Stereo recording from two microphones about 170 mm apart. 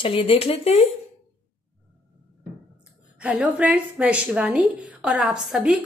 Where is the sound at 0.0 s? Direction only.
30° left (ahead or behind).